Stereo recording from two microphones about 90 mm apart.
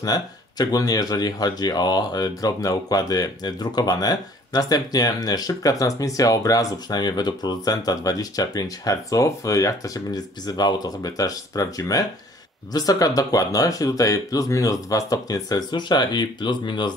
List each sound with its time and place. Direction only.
0.0 s speech: 45° left (ahead or behind)